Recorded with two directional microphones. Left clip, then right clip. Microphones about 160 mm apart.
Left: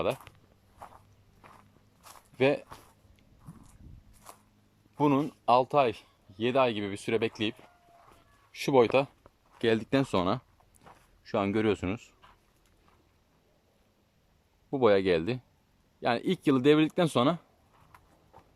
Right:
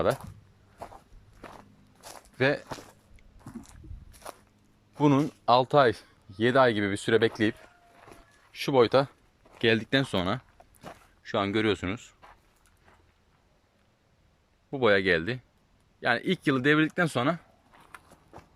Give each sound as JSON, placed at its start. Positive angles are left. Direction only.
{"t": 0.8, "sound": "walk", "side_deg": -30}
{"t": 2.0, "sound": "zipper", "side_deg": -40}
{"t": 2.4, "sound": "speech", "side_deg": 15}
{"t": 4.2, "sound": "a sound", "side_deg": -55}
{"t": 4.9, "sound": "speech", "side_deg": 5}
{"t": 8.5, "sound": "speech", "side_deg": 15}
{"t": 10.9, "sound": "a sound", "side_deg": -90}
{"t": 11.2, "sound": "speech", "side_deg": 5}
{"t": 14.7, "sound": "speech", "side_deg": 15}
{"t": 18.3, "sound": "a sound", "side_deg": -90}